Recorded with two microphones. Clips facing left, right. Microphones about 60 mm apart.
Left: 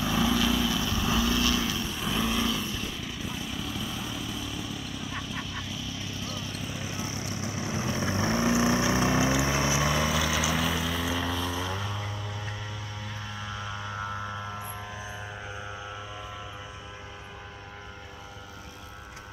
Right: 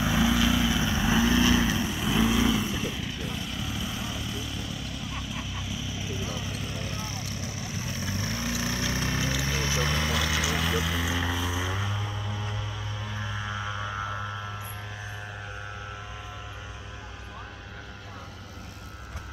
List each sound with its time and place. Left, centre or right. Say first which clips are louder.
0.0 s vehicle: right 2 dB; centre
1.9 s vehicle: right 4 dB; centre
6.6 s vehicle: even; centre
13.6 s a sound: right 1 dB; centre